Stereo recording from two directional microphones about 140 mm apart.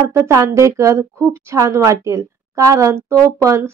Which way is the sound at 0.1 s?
20° right (ahead or behind).